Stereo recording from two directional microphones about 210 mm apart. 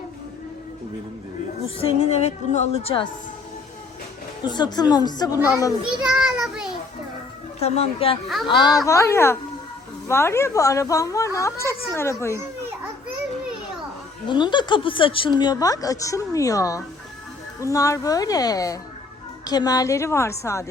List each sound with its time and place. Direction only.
1.6 s speech: 30° left (ahead or behind)
4.4 s speech: 20° left (ahead or behind)
6.1 s a sound: 5° right (ahead or behind)
7.6 s a woman's voice: 30° left (ahead or behind); by 12.4 s 10° left (ahead or behind)
14.3 s a woman's voice: 20° left (ahead or behind)